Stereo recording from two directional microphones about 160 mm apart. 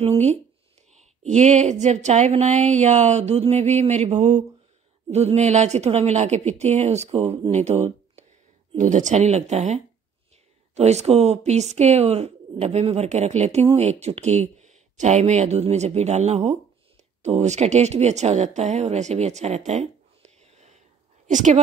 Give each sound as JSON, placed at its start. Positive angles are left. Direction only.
{"t": 0.0, "sound": "speech", "side_deg": -45}